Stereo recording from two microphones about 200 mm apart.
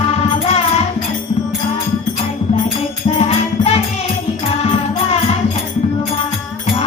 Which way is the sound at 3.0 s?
30° left (ahead or behind).